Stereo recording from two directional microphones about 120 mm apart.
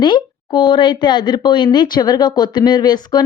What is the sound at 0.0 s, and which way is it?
Speech, 40° left (ahead or behind).